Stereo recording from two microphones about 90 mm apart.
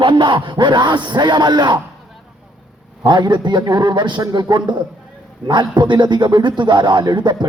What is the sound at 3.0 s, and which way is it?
Speech, 55° right (ahead or behind).